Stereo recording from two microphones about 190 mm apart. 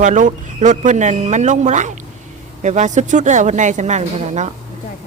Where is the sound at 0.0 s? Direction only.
40° right (ahead or behind).